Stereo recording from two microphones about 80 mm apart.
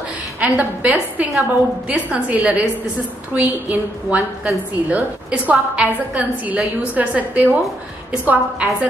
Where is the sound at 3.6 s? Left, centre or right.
Centre.